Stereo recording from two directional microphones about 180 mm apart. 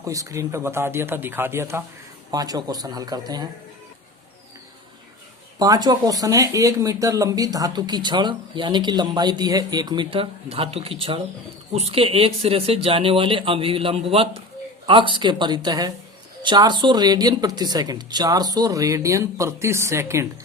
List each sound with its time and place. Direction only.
0.0 s speech: 20° right (ahead or behind)
5.5 s speech: 20° right (ahead or behind)